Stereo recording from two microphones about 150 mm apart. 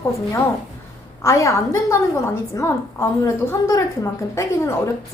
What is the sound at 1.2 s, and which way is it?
A woman's voice, 20° left (ahead or behind).